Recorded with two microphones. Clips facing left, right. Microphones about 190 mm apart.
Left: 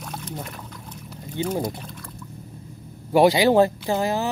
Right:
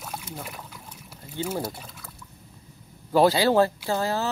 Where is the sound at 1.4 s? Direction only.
5° right (ahead or behind).